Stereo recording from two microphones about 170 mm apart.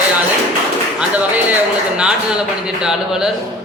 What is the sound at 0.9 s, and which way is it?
A man's voice, 10° right (ahead or behind).